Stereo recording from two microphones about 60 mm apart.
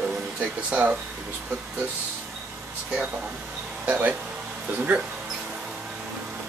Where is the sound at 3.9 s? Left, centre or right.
Right.